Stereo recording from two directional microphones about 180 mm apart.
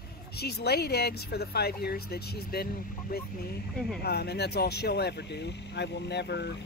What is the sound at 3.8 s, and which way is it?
Speech, 5° left (ahead or behind).